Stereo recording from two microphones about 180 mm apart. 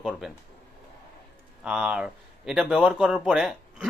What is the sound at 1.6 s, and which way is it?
Speech, 5° right (ahead or behind).